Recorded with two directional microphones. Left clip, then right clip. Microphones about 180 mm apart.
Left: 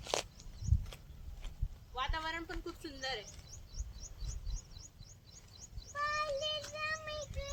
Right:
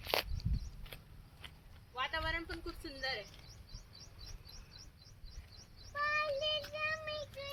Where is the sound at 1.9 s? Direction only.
30° right (ahead or behind).